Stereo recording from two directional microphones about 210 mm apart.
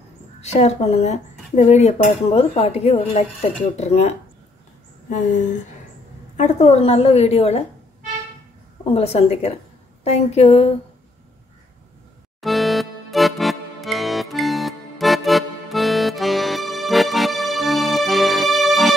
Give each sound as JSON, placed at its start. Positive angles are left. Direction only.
{"t": 0.4, "sound": "dishes", "side_deg": 30}
{"t": 6.3, "sound": "a woman's voice", "side_deg": 35}
{"t": 8.9, "sound": "a woman's voice", "side_deg": 30}
{"t": 12.4, "sound": "music", "side_deg": 0}